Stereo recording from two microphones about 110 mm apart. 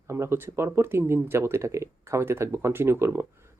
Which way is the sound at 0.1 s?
20° right (ahead or behind).